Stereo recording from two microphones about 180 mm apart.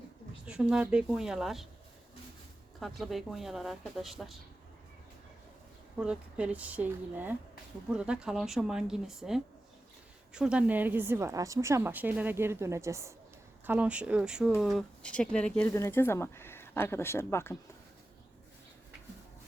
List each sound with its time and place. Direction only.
0.4 s speech: 5° right (ahead or behind)
2.8 s speech: centre (ahead or behind)
6.0 s a woman's voice: 5° right (ahead or behind); by 17.6 s 10° left (ahead or behind)